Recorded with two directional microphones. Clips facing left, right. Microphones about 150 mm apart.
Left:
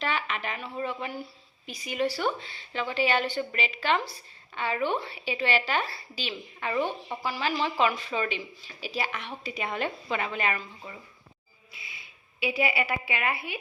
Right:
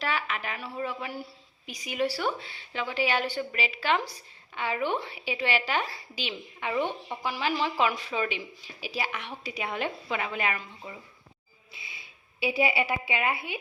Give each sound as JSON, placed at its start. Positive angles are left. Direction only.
{"t": 0.0, "sound": "speech", "side_deg": -5}
{"t": 12.4, "sound": "a woman's voice", "side_deg": -30}